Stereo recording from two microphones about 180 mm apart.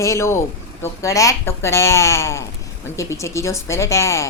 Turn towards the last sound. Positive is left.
turn(degrees=15)  # may be behind; listen again after turning